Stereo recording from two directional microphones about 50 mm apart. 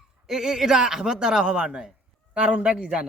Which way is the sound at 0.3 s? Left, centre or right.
Centre.